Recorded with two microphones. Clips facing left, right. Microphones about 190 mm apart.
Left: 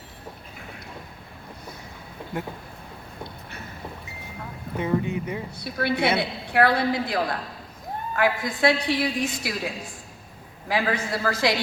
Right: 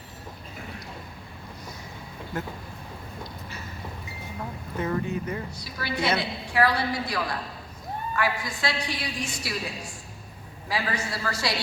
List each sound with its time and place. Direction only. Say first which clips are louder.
4.8 s speech: left 3 dB; 15° left (ahead or behind)
5.5 s a woman's voice: left 7 dB; 60° left (ahead or behind)